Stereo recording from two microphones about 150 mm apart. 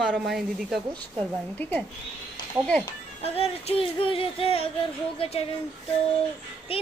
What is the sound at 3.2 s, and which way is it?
Speech, 40° left (ahead or behind).